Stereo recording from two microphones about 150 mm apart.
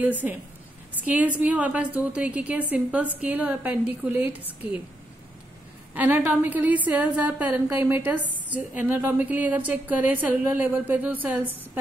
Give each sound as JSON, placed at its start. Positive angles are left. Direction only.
{"t": 0.0, "sound": "a woman's voice", "side_deg": -10}
{"t": 5.9, "sound": "a woman's voice", "side_deg": -10}